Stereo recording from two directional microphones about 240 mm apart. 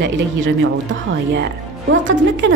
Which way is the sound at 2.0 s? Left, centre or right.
Right.